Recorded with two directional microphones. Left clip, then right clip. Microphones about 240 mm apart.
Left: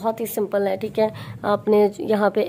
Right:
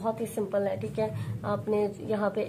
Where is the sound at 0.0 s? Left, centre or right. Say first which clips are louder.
Left 7 dB; left.